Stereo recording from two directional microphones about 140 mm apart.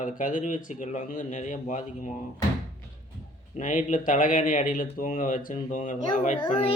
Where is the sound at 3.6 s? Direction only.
65° left (ahead or behind).